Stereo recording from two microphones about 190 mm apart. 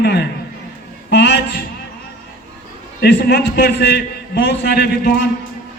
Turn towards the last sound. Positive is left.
turn(degrees=55)  # may be behind; listen again after turning